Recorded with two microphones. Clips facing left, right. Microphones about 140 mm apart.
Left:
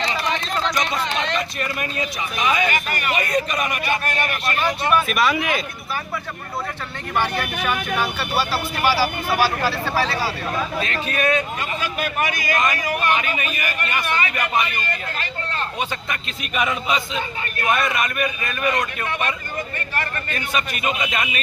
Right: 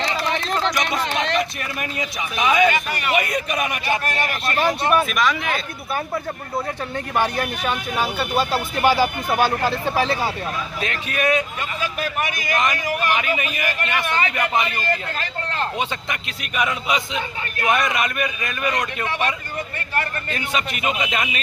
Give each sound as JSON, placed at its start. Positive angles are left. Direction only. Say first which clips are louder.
{"t": 1.8, "sound": "a man's voice", "louder": "left 1 dB", "side_deg": -15}
{"t": 4.5, "sound": "speech", "louder": "right 2 dB", "side_deg": -35}
{"t": 5.0, "sound": "speech", "louder": "left 1 dB", "side_deg": 5}
{"t": 8.2, "sound": "a man's voice", "louder": "right 2 dB", "side_deg": -20}
{"t": 12.5, "sound": "a man's voice", "louder": "right 2 dB", "side_deg": -20}
{"t": 17.6, "sound": "a man's voice", "louder": "right 1 dB", "side_deg": -20}
{"t": 20.3, "sound": "a man's voice", "louder": "right 1 dB", "side_deg": -20}